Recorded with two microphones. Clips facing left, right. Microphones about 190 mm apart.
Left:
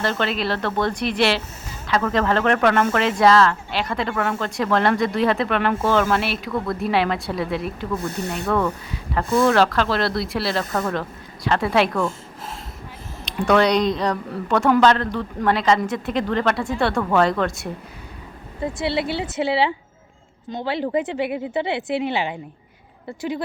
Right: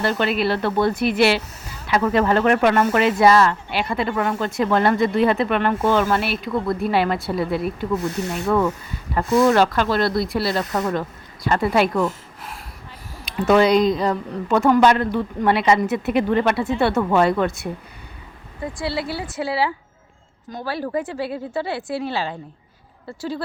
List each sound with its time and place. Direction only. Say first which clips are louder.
0.0 s speech: right 3 dB; 5° right (ahead or behind)
13.4 s speech: right 2 dB; 5° right (ahead or behind)
14.8 s speech: right 1 dB; 10° right (ahead or behind)
18.6 s speech: left 3 dB; 25° left (ahead or behind)